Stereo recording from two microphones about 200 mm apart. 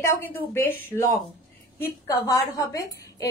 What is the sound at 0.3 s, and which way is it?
Speech, 10° left (ahead or behind).